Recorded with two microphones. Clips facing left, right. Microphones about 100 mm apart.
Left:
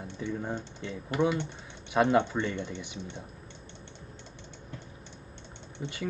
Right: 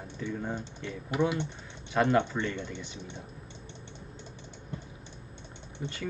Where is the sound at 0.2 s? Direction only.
15° left (ahead or behind).